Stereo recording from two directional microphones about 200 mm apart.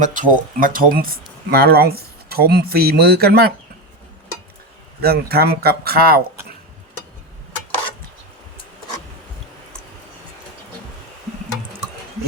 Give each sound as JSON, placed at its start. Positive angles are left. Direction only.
{"t": 0.0, "sound": "speech", "side_deg": -40}
{"t": 4.9, "sound": "speech", "side_deg": -50}